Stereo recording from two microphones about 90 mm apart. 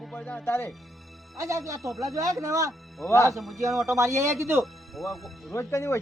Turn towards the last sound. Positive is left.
turn(degrees=30)  # may be behind; listen again after turning